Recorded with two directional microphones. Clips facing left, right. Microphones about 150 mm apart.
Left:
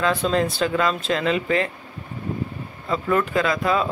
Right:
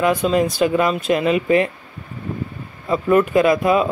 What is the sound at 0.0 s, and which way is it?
Speech, 15° right (ahead or behind).